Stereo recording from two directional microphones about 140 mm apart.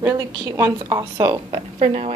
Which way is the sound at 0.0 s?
20° right (ahead or behind).